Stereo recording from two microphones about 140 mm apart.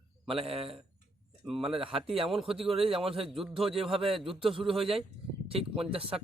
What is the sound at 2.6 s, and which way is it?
Speech, 40° right (ahead or behind).